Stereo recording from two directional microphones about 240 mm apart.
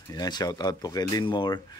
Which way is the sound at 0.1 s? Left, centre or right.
Centre.